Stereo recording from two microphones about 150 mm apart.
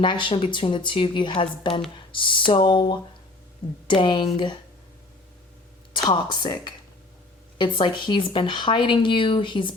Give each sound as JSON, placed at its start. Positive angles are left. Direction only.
{"t": 0.0, "sound": "speech", "side_deg": 35}
{"t": 6.1, "sound": "speech", "side_deg": 30}